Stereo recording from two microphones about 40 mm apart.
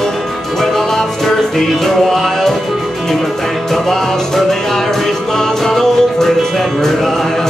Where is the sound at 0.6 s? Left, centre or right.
Centre.